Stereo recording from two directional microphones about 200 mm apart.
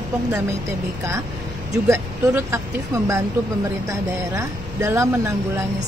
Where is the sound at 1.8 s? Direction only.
15° right (ahead or behind).